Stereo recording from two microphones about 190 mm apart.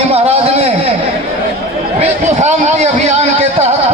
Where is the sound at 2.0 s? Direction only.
35° right (ahead or behind).